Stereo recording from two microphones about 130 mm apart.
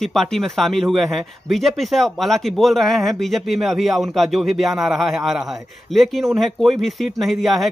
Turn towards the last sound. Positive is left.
turn(degrees=0)  # may be behind; listen again after turning